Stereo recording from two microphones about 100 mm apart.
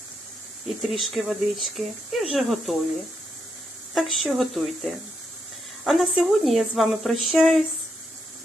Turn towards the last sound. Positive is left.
turn(degrees=0)  # may be behind; listen again after turning